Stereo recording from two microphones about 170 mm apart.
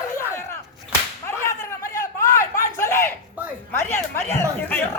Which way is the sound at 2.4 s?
15° left (ahead or behind).